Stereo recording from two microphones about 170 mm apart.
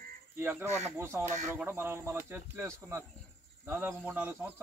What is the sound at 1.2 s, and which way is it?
Speech, 45° right (ahead or behind).